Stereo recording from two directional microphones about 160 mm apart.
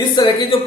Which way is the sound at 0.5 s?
35° left (ahead or behind).